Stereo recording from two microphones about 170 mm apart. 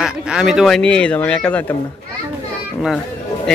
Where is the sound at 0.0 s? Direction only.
5° right (ahead or behind).